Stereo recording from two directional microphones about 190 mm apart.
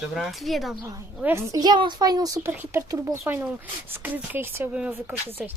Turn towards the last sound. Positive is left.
turn(degrees=-10)  # may be behind; listen again after turning